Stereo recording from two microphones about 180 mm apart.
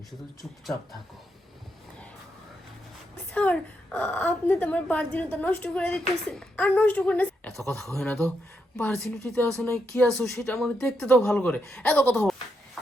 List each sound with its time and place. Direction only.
3.3 s a woman's voice: 5° left (ahead or behind)
9.3 s a woman's voice: 5° left (ahead or behind)